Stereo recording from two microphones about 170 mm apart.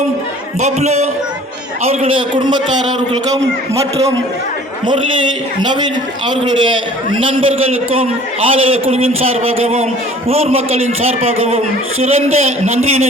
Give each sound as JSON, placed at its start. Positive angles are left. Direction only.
{"t": 0.6, "sound": "a man's voice", "side_deg": -40}
{"t": 5.6, "sound": "a man's voice", "side_deg": -25}